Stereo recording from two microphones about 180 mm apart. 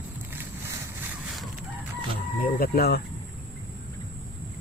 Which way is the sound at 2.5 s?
55° left (ahead or behind).